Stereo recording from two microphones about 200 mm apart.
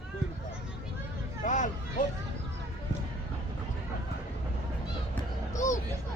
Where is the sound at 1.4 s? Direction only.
40° left (ahead or behind).